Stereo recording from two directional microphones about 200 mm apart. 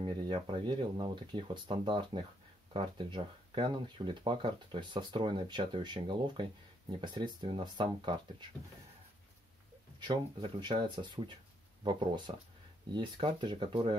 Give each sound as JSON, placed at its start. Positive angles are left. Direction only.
{"t": 0.0, "sound": "speech", "side_deg": -25}
{"t": 10.6, "sound": "speech", "side_deg": -25}